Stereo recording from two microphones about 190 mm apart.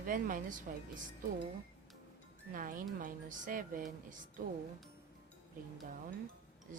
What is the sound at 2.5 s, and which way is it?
Speech, 45° right (ahead or behind).